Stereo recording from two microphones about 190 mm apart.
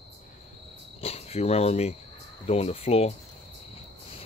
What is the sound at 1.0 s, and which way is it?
Speech, 35° left (ahead or behind).